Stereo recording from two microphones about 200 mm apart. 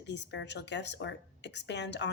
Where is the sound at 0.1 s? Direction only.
60° left (ahead or behind).